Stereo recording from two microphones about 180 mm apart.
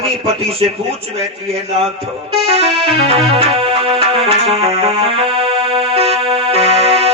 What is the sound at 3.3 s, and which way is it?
Music, 30° right (ahead or behind).